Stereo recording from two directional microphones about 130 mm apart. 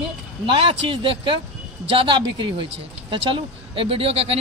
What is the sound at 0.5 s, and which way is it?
A man's voice, 45° right (ahead or behind).